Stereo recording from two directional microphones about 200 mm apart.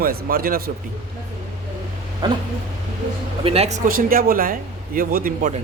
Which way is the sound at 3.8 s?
45° right (ahead or behind).